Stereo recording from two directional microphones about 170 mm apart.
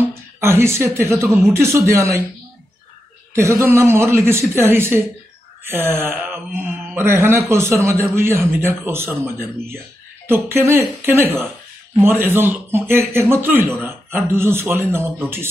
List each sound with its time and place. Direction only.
0.0 s a woman's voice: 15° right (ahead or behind)
3.3 s speech: 15° right (ahead or behind)